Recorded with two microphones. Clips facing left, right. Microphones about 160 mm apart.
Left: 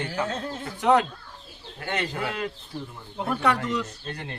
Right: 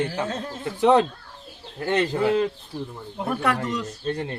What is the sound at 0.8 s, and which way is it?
A man's voice, 25° right (ahead or behind).